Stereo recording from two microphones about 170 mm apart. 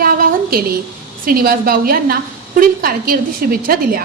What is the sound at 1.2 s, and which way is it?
A woman's voice, 60° right (ahead or behind).